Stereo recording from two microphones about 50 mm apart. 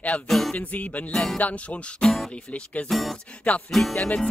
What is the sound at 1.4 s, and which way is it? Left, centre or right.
Music, left.